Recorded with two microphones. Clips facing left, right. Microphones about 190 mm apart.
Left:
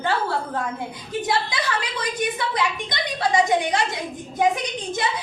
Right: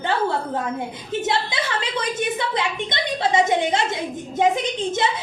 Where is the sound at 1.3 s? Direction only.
25° right (ahead or behind).